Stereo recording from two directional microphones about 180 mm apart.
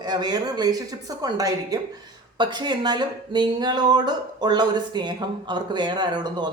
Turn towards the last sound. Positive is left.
turn(degrees=-25)  # may be behind; listen again after turning